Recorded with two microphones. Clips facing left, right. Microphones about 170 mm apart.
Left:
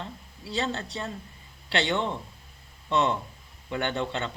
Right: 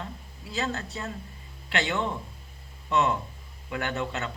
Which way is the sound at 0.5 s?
30° left (ahead or behind).